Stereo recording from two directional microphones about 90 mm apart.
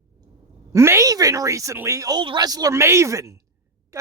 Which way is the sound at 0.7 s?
30° right (ahead or behind).